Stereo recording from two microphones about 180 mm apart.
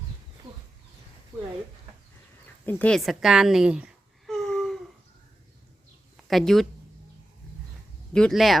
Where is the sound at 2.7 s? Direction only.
10° left (ahead or behind).